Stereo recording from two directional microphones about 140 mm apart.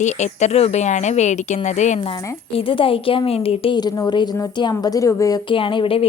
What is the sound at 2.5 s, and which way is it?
Speech, 40° left (ahead or behind).